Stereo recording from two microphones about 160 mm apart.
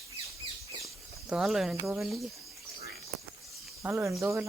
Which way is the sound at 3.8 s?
15° right (ahead or behind).